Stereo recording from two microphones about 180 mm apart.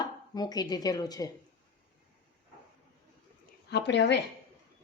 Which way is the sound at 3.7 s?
75° left (ahead or behind).